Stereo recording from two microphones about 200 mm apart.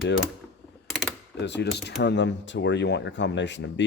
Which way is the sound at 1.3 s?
60° left (ahead or behind).